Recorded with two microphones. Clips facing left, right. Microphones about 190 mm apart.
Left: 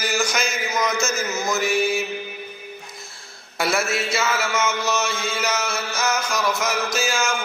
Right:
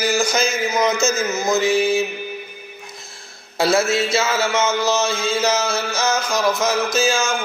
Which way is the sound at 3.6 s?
25° right (ahead or behind).